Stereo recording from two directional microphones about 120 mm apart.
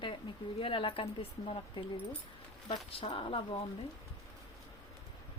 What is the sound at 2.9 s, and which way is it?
Speech, 50° left (ahead or behind).